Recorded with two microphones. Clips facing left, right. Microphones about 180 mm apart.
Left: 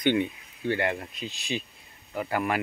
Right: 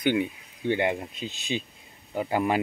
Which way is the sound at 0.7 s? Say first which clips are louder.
Right 2 dB; 20° right (ahead or behind).